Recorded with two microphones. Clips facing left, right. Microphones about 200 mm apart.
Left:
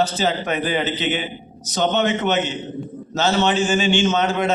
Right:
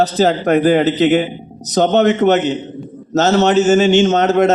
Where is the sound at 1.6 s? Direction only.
40° right (ahead or behind).